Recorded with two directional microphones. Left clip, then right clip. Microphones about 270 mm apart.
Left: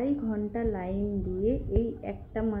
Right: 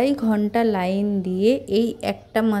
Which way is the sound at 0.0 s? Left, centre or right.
Right.